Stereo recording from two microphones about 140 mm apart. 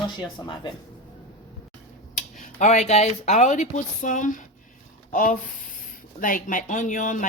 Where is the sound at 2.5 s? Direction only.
60° left (ahead or behind).